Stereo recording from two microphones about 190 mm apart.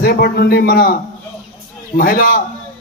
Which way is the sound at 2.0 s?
50° left (ahead or behind).